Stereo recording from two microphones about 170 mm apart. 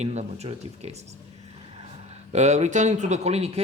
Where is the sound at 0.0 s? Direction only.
40° right (ahead or behind).